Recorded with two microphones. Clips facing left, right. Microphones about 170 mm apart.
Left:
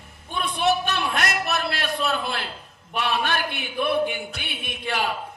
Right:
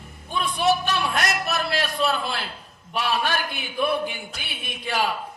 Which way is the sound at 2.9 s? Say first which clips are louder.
Even; 60° left (ahead or behind).